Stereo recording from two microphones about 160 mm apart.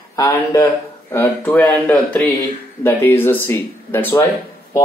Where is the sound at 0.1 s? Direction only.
20° left (ahead or behind).